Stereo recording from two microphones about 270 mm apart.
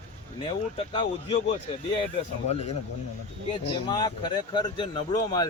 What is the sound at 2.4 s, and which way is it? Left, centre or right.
Speech, left.